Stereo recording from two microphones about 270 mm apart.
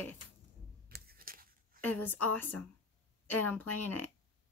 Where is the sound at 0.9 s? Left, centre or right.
Right.